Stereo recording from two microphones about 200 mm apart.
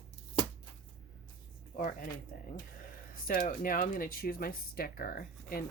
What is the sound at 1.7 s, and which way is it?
Speech, 45° left (ahead or behind).